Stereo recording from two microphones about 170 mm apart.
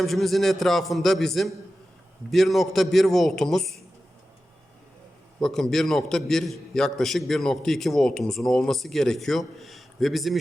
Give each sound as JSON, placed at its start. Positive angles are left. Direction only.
{"t": 0.0, "sound": "a man's voice", "side_deg": 0}
{"t": 5.4, "sound": "a man's voice", "side_deg": 5}